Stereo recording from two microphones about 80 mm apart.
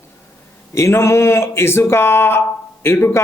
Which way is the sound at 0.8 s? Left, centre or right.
Left.